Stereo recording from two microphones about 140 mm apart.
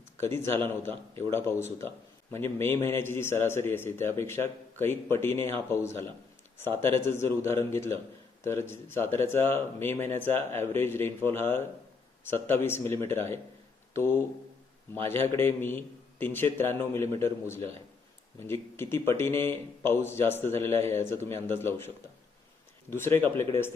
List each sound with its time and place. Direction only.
0.2 s speech: 20° left (ahead or behind)
18.3 s speech: 20° left (ahead or behind)